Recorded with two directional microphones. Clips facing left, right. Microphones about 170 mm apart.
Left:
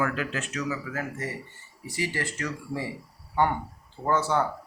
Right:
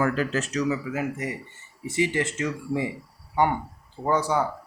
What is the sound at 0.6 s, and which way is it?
Speech, 20° right (ahead or behind).